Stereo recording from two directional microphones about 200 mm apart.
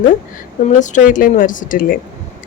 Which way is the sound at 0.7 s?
40° left (ahead or behind).